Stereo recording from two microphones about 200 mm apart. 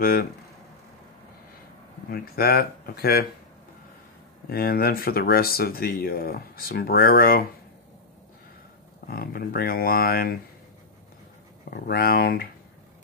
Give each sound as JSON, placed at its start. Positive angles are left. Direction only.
{"t": 0.0, "sound": "speech", "side_deg": 50}
{"t": 2.0, "sound": "speech", "side_deg": 50}
{"t": 4.5, "sound": "speech", "side_deg": 50}
{"t": 9.0, "sound": "speech", "side_deg": 50}
{"t": 11.7, "sound": "speech", "side_deg": 50}